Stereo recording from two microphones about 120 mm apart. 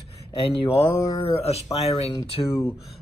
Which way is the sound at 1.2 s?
55° left (ahead or behind).